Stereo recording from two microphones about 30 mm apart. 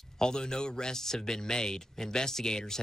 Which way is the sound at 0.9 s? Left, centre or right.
Centre.